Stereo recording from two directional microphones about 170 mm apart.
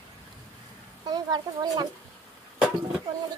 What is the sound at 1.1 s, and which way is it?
Speech, 25° right (ahead or behind).